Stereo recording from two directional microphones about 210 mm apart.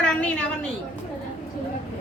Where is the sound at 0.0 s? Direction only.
5° left (ahead or behind).